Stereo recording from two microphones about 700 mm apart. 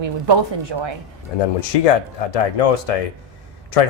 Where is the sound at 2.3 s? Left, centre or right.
Left.